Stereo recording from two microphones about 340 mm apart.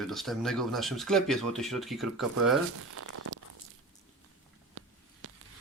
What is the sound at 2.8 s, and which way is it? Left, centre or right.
Crumpling, right.